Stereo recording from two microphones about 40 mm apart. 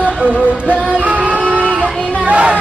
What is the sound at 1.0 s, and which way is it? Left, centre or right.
Music, right.